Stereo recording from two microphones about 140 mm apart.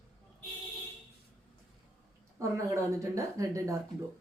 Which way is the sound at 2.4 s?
20° right (ahead or behind).